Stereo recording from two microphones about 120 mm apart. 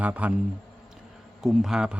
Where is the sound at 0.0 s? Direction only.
10° right (ahead or behind).